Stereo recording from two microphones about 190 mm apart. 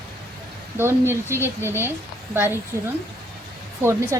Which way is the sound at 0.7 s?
10° right (ahead or behind).